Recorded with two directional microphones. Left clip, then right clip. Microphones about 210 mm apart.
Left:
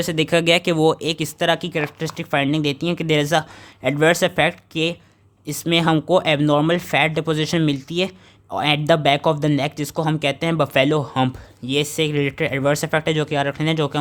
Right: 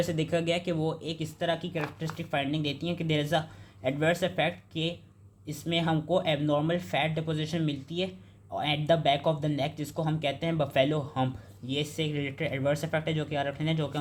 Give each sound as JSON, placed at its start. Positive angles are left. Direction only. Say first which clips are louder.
{"t": 0.0, "sound": "speech", "louder": "left 10 dB", "side_deg": 40}